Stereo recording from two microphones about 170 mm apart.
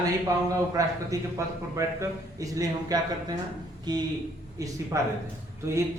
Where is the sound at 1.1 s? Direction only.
20° right (ahead or behind).